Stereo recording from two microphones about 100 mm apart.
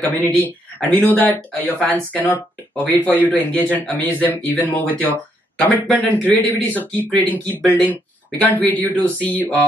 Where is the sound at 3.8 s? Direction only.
15° left (ahead or behind).